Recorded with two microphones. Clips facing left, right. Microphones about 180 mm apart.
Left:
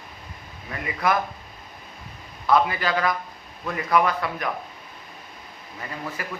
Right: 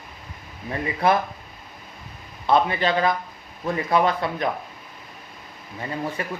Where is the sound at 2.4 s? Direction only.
25° right (ahead or behind).